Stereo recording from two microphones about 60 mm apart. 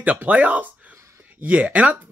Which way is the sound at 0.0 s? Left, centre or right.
Right.